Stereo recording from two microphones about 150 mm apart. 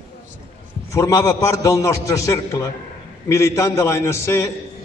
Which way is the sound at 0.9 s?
20° left (ahead or behind).